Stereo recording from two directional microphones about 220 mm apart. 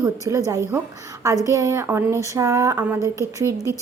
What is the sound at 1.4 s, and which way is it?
A woman's voice, 15° right (ahead or behind).